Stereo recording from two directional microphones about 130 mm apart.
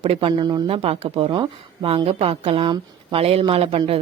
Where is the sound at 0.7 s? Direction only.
45° right (ahead or behind).